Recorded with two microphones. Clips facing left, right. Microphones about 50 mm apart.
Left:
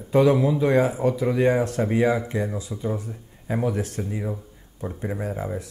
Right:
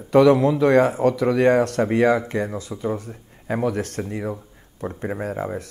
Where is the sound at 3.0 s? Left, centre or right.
Right.